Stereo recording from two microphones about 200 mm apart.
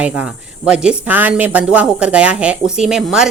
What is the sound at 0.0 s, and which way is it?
Speech, 5° right (ahead or behind).